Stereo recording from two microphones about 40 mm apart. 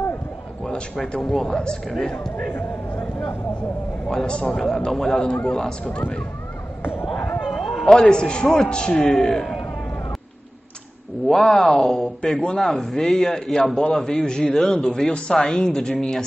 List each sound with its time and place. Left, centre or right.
1.3 s speech: centre
4.5 s speech: centre
5.2 s a man's voice: left
6.8 s a sound: left
7.4 s a sound: centre
8.0 s a man's voice: left
11.2 s speech: centre